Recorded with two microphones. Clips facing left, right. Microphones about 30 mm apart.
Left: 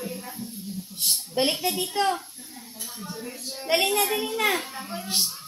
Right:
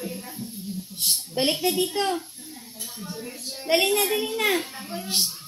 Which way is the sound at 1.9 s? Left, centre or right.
Centre.